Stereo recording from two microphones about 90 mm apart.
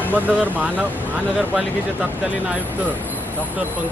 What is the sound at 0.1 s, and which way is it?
Speech, 20° right (ahead or behind).